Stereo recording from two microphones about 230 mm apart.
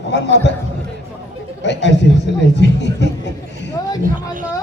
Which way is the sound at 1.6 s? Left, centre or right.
Left.